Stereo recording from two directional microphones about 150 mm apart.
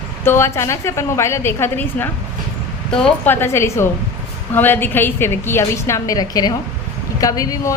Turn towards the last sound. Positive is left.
turn(degrees=20)  # may be behind; listen again after turning